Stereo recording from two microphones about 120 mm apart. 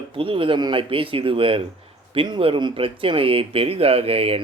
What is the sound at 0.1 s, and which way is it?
Speech, 45° right (ahead or behind).